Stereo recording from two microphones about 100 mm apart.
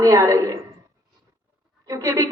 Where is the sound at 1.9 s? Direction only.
30° right (ahead or behind).